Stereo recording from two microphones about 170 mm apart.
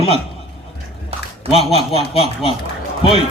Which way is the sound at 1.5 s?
35° left (ahead or behind).